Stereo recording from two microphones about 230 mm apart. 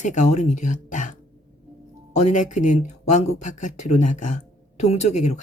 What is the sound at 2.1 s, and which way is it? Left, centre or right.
Speech, left.